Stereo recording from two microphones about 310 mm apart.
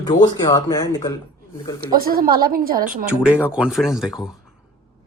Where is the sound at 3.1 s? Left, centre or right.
Centre.